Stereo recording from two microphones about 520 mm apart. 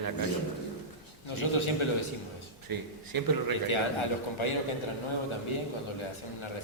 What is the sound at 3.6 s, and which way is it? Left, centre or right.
Speech, left.